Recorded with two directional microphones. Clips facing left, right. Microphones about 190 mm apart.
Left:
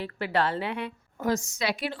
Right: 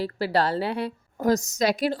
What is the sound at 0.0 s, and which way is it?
A woman's voice, 35° right (ahead or behind).